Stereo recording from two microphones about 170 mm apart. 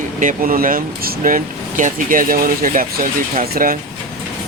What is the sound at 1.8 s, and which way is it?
Speech, 50° right (ahead or behind).